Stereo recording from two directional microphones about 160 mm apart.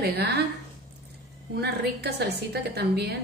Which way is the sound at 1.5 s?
90° right.